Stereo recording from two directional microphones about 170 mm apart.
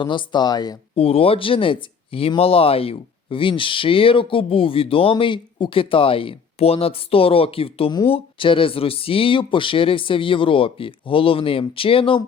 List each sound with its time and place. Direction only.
0.0 s speech: 30° left (ahead or behind)
0.9 s speech: 35° left (ahead or behind)